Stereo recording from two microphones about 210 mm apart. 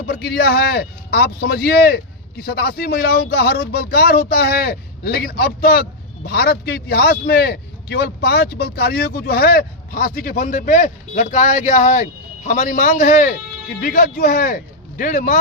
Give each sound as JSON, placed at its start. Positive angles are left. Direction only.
{"t": 0.1, "sound": "a man's voice", "side_deg": 50}